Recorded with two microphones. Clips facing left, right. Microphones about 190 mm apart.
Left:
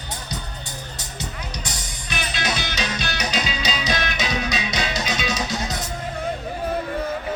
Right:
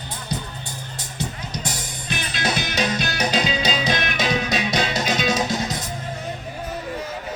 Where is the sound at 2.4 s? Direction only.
50° right (ahead or behind).